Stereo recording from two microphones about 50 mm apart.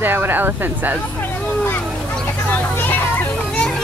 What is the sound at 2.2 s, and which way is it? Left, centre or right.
Vehicle, left.